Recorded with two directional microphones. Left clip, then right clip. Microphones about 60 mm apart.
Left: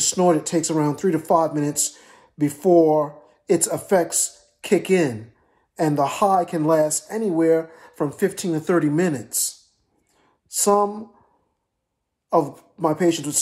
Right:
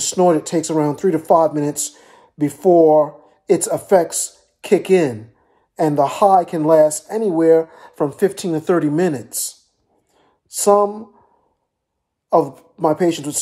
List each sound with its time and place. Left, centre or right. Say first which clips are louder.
0.3 s speech: right 3 dB; right
10.1 s a sound: even; right
10.8 s speech: right 4 dB; right
12.3 s speech: right 4 dB; right